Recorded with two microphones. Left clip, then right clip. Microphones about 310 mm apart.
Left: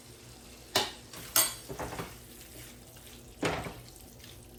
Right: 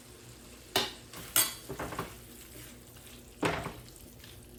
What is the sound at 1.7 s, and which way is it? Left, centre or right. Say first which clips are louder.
Dishes: even; centre.